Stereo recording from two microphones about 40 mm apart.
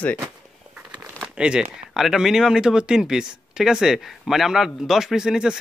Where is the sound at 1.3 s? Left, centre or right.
Right.